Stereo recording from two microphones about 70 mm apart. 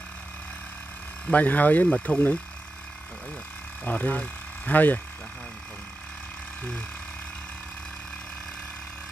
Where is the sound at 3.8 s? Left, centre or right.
Left.